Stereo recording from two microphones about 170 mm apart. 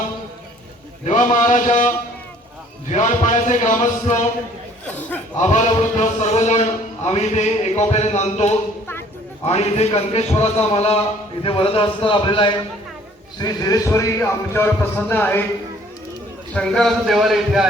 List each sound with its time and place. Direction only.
1.0 s a man's voice: 50° left (ahead or behind)
2.9 s a man's voice: 45° left (ahead or behind)
5.4 s a man's voice: 45° left (ahead or behind); by 15.4 s 10° left (ahead or behind)
16.6 s a man's voice: 5° left (ahead or behind)